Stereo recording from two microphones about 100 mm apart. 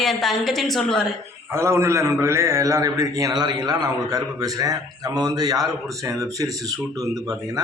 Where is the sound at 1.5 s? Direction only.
25° right (ahead or behind).